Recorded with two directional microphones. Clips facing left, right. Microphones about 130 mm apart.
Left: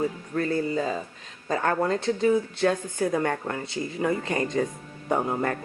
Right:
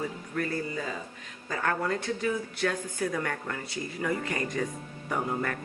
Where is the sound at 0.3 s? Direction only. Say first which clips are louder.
Left 6 dB; 30° left (ahead or behind).